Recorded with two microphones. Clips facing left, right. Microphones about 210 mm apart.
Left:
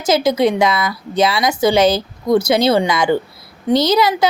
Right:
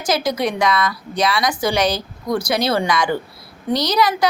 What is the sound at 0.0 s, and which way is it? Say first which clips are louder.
Speech: left 6 dB; 25° left (ahead or behind).